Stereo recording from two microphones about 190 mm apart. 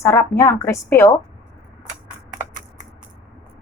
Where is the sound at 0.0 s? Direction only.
15° left (ahead or behind).